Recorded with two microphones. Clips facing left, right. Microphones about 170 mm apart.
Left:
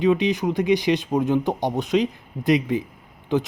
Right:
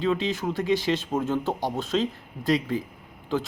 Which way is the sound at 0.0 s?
15° left (ahead or behind).